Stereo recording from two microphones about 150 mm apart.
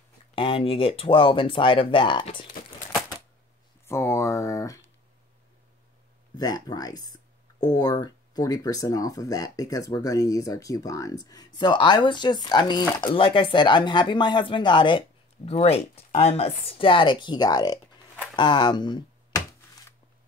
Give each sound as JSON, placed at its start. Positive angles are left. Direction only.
{"t": 0.4, "sound": "speech", "side_deg": 35}
{"t": 3.8, "sound": "a sound", "side_deg": 15}
{"t": 6.3, "sound": "speech", "side_deg": 25}